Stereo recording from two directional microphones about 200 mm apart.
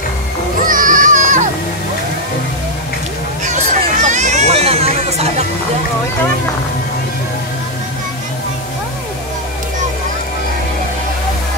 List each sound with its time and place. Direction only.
0.7 s music: 40° right (ahead or behind)
3.4 s hubbub: 40° right (ahead or behind)